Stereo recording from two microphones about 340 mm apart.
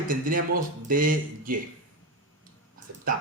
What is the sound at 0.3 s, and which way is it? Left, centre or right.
Speech, right.